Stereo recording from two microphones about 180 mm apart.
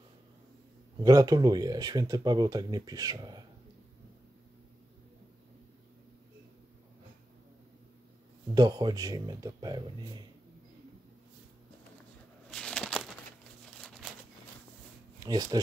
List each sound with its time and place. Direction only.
1.0 s speech: 20° right (ahead or behind)
8.5 s speech: 25° right (ahead or behind)
12.4 s a sound: 5° left (ahead or behind)
15.2 s speech: 20° right (ahead or behind)